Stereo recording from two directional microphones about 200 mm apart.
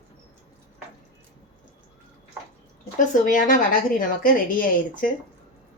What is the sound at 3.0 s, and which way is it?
Speech, 40° left (ahead or behind).